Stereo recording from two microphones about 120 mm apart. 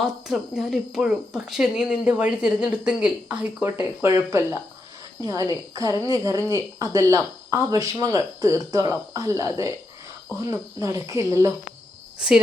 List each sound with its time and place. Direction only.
0.0 s speech: 5° right (ahead or behind)
4.0 s a woman's voice: 25° right (ahead or behind)
12.2 s speech: 5° right (ahead or behind)